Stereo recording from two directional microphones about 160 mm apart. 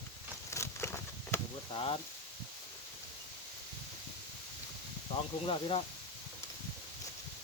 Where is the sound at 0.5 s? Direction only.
15° left (ahead or behind).